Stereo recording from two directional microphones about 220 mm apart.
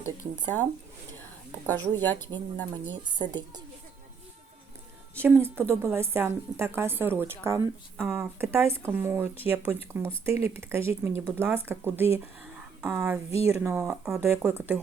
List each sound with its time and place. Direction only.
1.6 s speech: 10° left (ahead or behind)
2.9 s a woman's voice: 20° right (ahead or behind)
5.1 s a woman's voice: 10° right (ahead or behind)
12.2 s a sound: 5° right (ahead or behind)
13.5 s a woman's voice: 10° right (ahead or behind)